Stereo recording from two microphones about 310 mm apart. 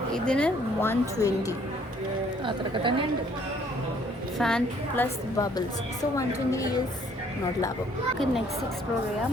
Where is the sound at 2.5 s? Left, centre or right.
Centre.